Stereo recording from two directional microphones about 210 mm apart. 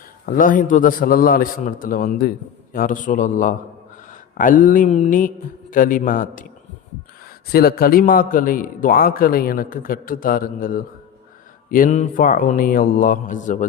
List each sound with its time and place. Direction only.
0.3 s a man's voice: 40° left (ahead or behind)